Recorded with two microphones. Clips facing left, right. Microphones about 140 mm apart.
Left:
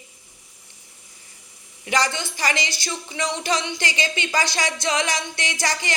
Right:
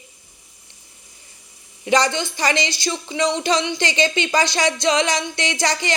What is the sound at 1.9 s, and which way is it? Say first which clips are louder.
Speech: right 5 dB; 20° right (ahead or behind).